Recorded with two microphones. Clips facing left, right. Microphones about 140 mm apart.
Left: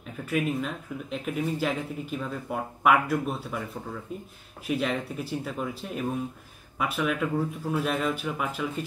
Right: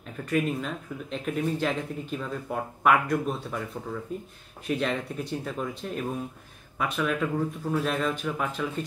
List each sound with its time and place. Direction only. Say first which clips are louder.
0.2 s speech: right 1 dB; 5° left (ahead or behind)